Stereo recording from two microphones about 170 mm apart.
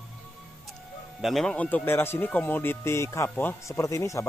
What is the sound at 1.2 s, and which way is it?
Speech, centre (ahead or behind).